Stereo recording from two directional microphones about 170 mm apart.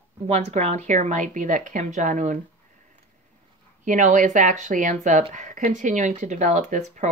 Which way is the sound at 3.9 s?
45° right (ahead or behind).